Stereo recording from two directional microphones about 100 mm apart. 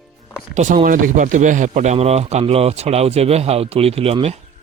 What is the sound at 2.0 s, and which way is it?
Speech, 90° right.